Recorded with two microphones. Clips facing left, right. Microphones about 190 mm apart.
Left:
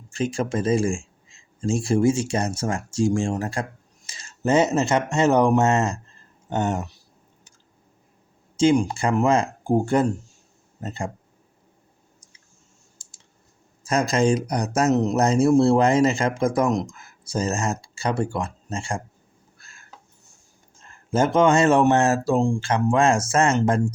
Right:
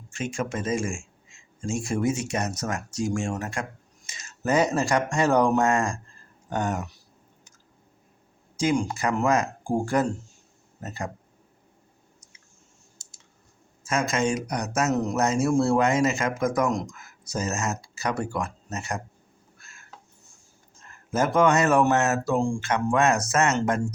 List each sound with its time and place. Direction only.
0.1 s speech: 35° left (ahead or behind)
8.5 s speech: 20° left (ahead or behind)
13.8 s a man's voice: 35° left (ahead or behind)
19.5 s a sound: 35° left (ahead or behind)
20.8 s speech: 30° left (ahead or behind)